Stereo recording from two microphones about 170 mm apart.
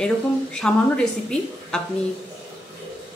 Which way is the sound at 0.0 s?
5° left (ahead or behind).